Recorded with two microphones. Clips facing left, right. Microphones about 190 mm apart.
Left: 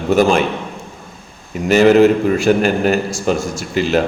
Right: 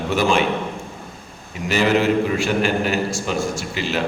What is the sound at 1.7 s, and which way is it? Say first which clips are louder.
A man's voice: left 8 dB; 45° left (ahead or behind).